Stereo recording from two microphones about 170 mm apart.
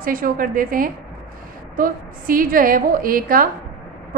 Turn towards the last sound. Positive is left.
turn(degrees=-55)  # may be behind; listen again after turning